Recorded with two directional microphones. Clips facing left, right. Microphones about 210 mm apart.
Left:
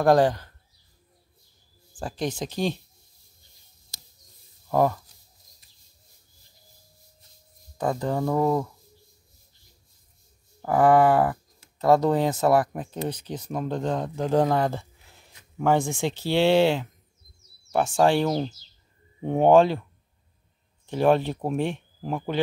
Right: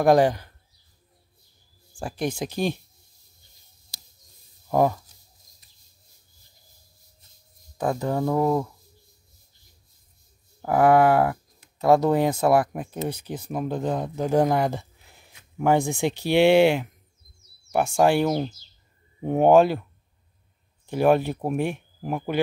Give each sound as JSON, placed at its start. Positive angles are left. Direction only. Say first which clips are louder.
{"t": 0.0, "sound": "speech", "louder": "right 1 dB", "side_deg": -15}
{"t": 2.0, "sound": "speech", "louder": "right 1 dB", "side_deg": -10}
{"t": 4.6, "sound": "speech", "louder": "right 1 dB", "side_deg": -10}
{"t": 7.7, "sound": "speech", "louder": "right 1 dB", "side_deg": -5}
{"t": 10.6, "sound": "speech", "louder": "right 1 dB", "side_deg": -10}
{"t": 20.8, "sound": "speech", "louder": "right 1 dB", "side_deg": -10}